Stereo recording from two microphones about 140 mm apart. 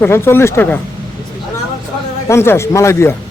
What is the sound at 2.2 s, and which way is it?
Speech, 20° left (ahead or behind).